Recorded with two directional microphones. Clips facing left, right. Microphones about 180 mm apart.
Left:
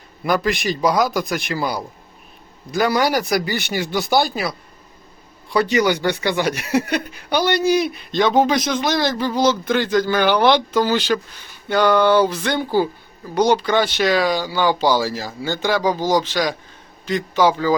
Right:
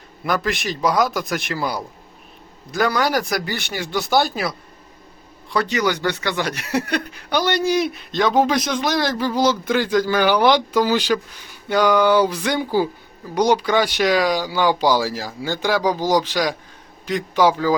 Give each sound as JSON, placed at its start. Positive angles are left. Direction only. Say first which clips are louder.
{"t": 0.3, "sound": "speech", "louder": "left 3 dB", "side_deg": 0}
{"t": 2.7, "sound": "speech", "louder": "left 2 dB", "side_deg": 15}
{"t": 5.7, "sound": "speech", "louder": "left 3 dB", "side_deg": 15}